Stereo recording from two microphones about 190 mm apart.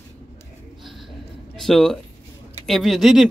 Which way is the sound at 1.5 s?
Centre (ahead or behind).